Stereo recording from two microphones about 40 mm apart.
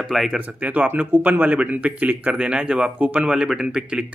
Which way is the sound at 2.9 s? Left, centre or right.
Right.